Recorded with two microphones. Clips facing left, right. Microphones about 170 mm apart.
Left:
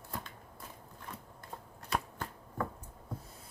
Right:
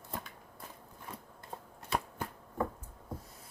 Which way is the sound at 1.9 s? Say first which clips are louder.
Right 1 dB; 15° right (ahead or behind).